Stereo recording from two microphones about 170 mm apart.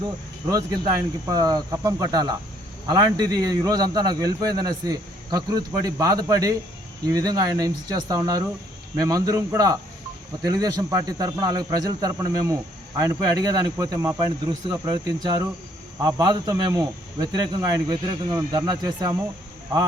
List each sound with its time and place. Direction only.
0.4 s a man's voice: 20° right (ahead or behind)